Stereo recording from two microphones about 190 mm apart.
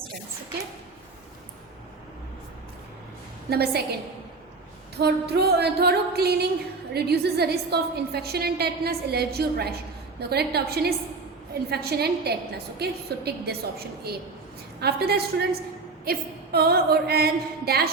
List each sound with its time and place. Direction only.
3.5 s a woman's voice: 55° right (ahead or behind)
4.9 s a woman's voice: 60° right (ahead or behind)